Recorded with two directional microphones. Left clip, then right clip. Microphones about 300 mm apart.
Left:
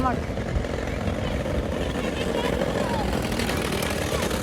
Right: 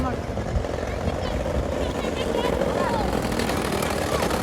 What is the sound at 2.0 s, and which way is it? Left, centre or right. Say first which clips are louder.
Vehicle: right 1 dB; right.